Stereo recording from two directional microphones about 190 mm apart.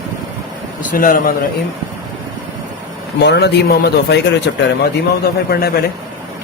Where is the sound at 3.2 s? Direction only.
60° left (ahead or behind).